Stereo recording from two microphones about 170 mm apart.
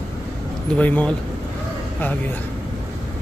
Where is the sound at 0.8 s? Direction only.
10° left (ahead or behind).